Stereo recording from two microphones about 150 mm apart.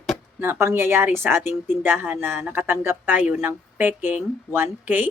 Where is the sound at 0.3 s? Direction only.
15° right (ahead or behind).